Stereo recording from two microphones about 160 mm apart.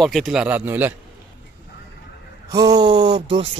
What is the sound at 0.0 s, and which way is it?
Speech, centre (ahead or behind).